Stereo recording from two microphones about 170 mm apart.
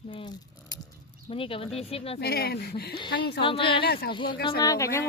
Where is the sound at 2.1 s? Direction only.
70° left (ahead or behind).